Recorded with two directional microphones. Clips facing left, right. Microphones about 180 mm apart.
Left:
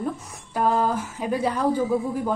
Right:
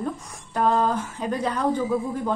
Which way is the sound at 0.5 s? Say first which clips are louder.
Even; 10° left (ahead or behind).